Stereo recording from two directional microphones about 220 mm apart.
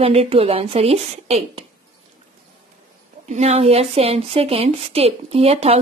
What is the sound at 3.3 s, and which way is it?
A woman's voice, 30° right (ahead or behind).